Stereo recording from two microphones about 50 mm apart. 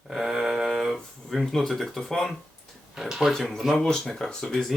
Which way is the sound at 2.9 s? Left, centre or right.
Centre.